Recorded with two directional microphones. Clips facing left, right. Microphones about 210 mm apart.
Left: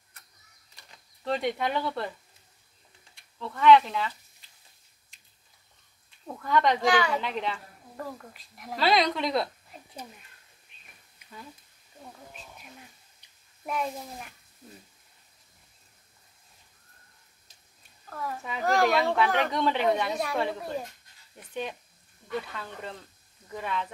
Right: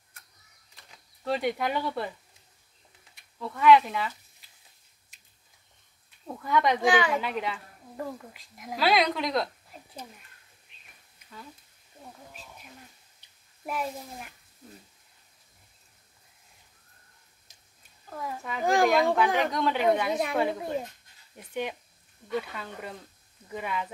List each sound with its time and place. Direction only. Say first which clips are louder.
1.2 s speech: even; 5° right (ahead or behind)
3.2 s speech: even; 5° right (ahead or behind)
6.0 s a sound: even; 5° right (ahead or behind)
7.0 s a woman's voice: right 1 dB; 15° right (ahead or behind); by 9.5 s centre (ahead or behind)
13.7 s a woman's voice: left 1 dB; 5° right (ahead or behind)
18.6 s speech: right 1 dB; 15° right (ahead or behind)
18.9 s a woman's voice: right 1 dB; centre (ahead or behind)
20.1 s speech: right 2 dB; 15° right (ahead or behind)